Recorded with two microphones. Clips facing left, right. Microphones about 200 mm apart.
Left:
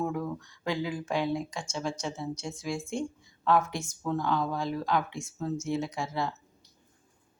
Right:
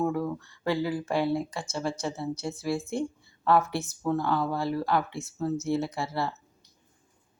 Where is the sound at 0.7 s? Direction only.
5° right (ahead or behind).